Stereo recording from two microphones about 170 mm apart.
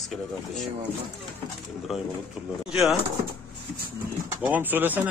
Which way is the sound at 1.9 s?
Centre (ahead or behind).